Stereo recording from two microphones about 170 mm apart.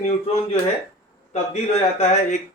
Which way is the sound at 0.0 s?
35° left (ahead or behind).